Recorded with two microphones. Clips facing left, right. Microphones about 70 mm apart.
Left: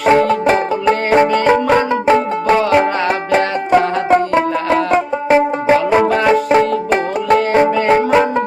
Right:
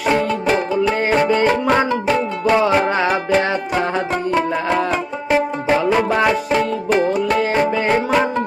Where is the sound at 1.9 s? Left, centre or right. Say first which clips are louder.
Left 5 dB; left.